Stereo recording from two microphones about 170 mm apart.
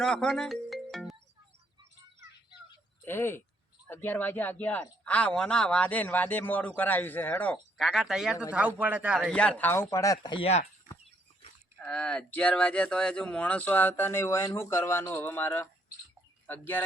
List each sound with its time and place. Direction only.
0.0 s music: 5° left (ahead or behind)
3.0 s speech: 15° left (ahead or behind)
7.8 s a man's voice: centre (ahead or behind)
9.3 s speech: 5° left (ahead or behind); by 10.6 s 30° left (ahead or behind)
11.8 s speech: 5° left (ahead or behind)